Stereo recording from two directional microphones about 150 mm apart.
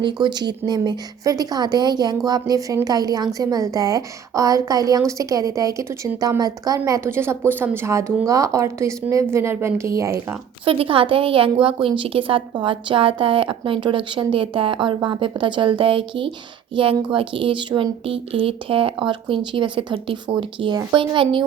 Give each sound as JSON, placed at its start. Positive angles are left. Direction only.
{"t": 0.0, "sound": "a woman's voice", "side_deg": -30}
{"t": 10.7, "sound": "speech", "side_deg": -35}